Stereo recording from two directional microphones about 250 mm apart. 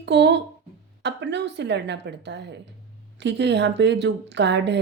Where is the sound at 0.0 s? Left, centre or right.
Right.